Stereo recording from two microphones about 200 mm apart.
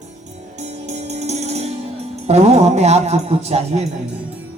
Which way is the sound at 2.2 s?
30° right (ahead or behind).